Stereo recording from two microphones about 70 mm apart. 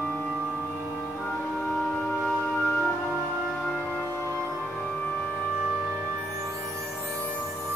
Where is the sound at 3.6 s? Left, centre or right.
Centre.